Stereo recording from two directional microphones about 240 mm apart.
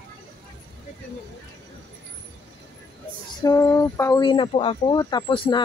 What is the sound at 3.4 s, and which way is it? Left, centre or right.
Speech, centre.